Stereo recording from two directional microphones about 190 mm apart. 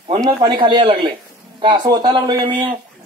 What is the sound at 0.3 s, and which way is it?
Speech, 25° right (ahead or behind).